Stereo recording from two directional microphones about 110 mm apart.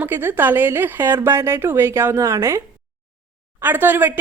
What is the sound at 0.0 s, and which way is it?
Speech, 20° right (ahead or behind).